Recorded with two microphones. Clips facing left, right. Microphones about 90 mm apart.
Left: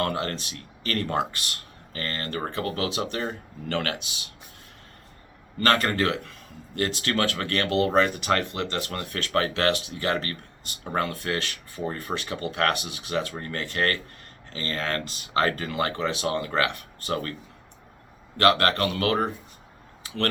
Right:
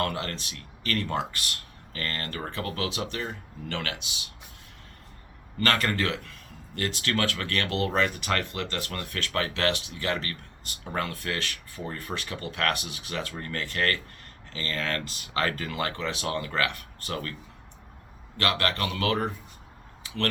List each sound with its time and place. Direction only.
0.0 s speech: 35° left (ahead or behind)
1.2 s speech: 25° left (ahead or behind); by 4.2 s 50° left (ahead or behind)
5.5 s speech: 35° left (ahead or behind)
18.3 s speech: 50° left (ahead or behind)